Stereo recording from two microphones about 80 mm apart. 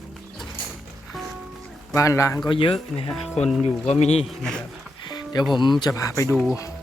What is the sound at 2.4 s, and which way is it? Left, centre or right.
Speech, left.